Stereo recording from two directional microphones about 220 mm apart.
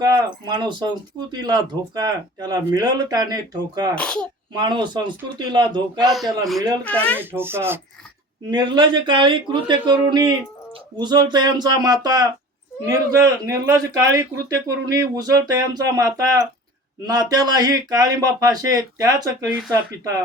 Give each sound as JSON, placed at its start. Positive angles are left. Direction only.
{"t": 0.0, "sound": "a man's voice", "side_deg": -20}
{"t": 3.9, "sound": "speech", "side_deg": 5}
{"t": 4.5, "sound": "speech", "side_deg": -20}
{"t": 6.8, "sound": "speech", "side_deg": 5}
{"t": 7.2, "sound": "a man's voice", "side_deg": -10}